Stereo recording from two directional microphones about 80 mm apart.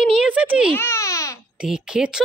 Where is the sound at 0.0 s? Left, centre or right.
Centre.